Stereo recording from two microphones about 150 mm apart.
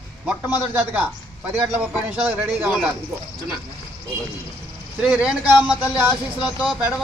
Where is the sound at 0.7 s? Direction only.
10° right (ahead or behind).